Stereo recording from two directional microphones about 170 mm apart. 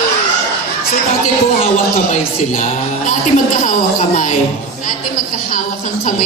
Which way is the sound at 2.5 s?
45° left (ahead or behind).